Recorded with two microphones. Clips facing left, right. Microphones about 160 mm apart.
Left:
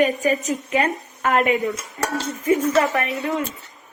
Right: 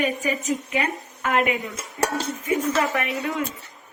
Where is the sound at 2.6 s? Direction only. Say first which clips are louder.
Left 4 dB; 40° left (ahead or behind).